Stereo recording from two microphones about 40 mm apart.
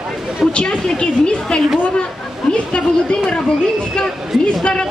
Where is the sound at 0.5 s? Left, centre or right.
Left.